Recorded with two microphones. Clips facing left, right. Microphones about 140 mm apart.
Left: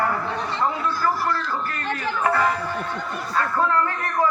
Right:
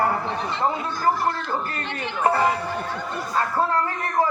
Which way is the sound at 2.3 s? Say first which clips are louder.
Right 2 dB; 30° right (ahead or behind).